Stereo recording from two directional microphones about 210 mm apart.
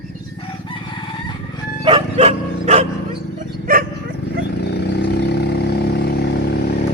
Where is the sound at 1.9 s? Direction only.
25° right (ahead or behind).